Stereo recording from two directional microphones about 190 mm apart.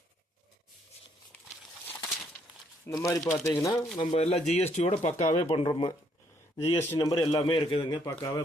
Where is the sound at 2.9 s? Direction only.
15° left (ahead or behind).